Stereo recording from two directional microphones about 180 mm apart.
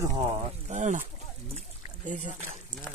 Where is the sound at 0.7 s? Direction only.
40° right (ahead or behind).